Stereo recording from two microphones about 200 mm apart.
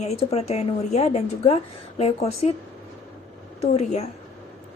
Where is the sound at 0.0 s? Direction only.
30° left (ahead or behind).